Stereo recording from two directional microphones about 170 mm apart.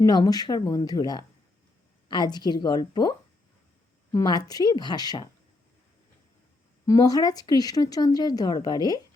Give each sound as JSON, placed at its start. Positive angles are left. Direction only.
{"t": 0.0, "sound": "speech", "side_deg": 25}
{"t": 6.8, "sound": "speech", "side_deg": 20}